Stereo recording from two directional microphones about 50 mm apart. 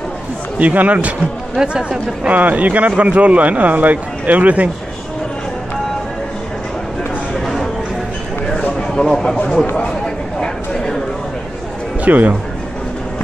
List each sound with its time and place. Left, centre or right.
0.6 s speech: right
1.6 s speech: centre
7.3 s a sound: centre
12.0 s speech: right